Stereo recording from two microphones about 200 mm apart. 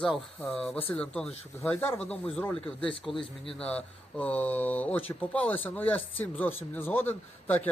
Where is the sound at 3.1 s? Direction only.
25° left (ahead or behind).